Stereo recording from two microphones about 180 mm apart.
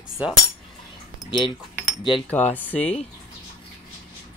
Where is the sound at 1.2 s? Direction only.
25° left (ahead or behind).